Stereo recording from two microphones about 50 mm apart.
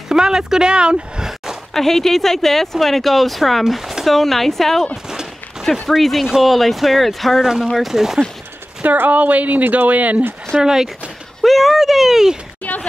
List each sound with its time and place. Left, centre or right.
0.1 s speech: centre
1.7 s speech: centre
8.9 s speech: right
10.6 s speech: centre
11.4 s a sound: centre